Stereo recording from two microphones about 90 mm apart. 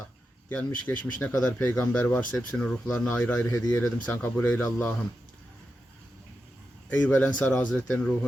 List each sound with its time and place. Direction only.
0.5 s speech: 20° left (ahead or behind)
6.9 s speech: 15° left (ahead or behind)